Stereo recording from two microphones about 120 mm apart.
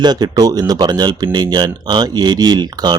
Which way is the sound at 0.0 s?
35° right (ahead or behind).